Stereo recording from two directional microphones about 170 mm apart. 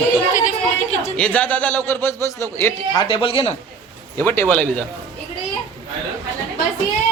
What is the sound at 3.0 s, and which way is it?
Speech, 30° left (ahead or behind).